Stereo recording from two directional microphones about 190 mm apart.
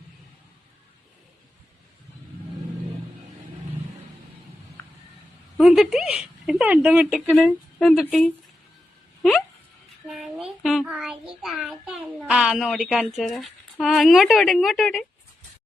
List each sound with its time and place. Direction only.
5.5 s a child's voice: centre (ahead or behind)
10.1 s child singing: centre (ahead or behind)
11.4 s a child's voice: centre (ahead or behind)